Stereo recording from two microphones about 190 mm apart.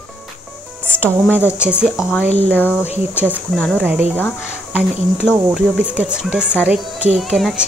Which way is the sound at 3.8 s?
10° right (ahead or behind).